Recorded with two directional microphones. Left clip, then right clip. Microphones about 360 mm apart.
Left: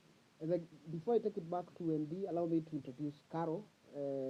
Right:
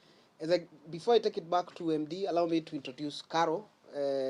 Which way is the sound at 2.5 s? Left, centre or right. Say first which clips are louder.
Right 5 dB; right.